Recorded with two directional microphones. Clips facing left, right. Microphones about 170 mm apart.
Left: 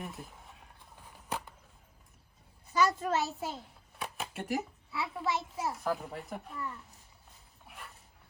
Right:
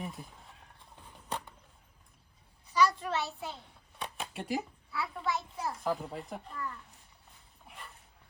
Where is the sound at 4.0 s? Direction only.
5° left (ahead or behind).